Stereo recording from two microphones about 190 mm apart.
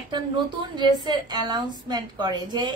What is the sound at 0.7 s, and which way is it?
A woman's voice, 20° right (ahead or behind).